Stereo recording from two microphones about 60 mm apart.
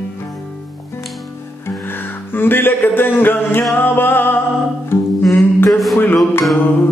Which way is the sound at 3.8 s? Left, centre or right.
Left.